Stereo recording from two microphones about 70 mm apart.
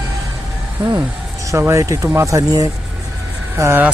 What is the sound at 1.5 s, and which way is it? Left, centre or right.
A man's voice, right.